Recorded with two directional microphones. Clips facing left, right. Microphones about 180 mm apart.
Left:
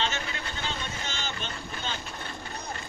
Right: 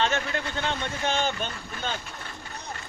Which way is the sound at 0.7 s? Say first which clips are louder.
Right 7 dB; 55° right (ahead or behind).